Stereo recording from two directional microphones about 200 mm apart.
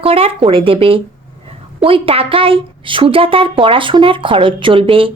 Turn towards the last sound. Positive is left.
turn(degrees=-25)  # may be behind; listen again after turning